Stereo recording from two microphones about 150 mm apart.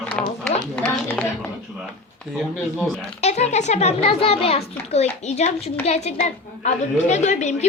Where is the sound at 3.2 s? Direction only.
45° left (ahead or behind).